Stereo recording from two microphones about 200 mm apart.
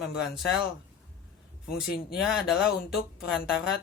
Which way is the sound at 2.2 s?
5° right (ahead or behind).